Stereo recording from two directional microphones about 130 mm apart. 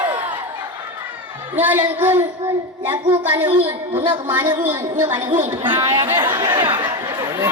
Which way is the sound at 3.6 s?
50° right (ahead or behind).